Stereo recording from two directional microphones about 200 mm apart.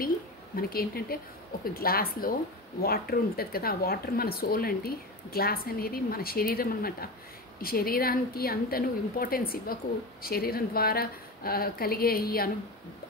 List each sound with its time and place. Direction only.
0.6 s a woman's voice: 50° left (ahead or behind)